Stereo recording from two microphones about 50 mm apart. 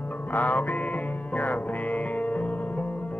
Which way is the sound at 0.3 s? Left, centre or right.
Left.